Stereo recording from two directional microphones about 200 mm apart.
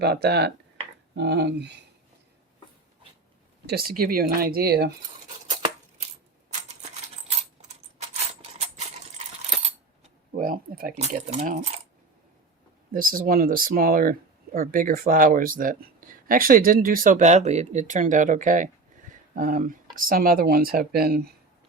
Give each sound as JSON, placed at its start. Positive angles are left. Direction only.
{"t": 0.0, "sound": "speech", "side_deg": -55}
{"t": 3.7, "sound": "speech", "side_deg": -50}
{"t": 10.3, "sound": "speech", "side_deg": -45}
{"t": 11.0, "sound": "speech", "side_deg": -35}
{"t": 12.9, "sound": "speech", "side_deg": -45}